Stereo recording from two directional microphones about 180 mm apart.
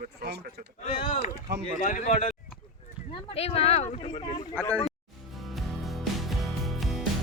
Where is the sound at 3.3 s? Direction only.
35° left (ahead or behind).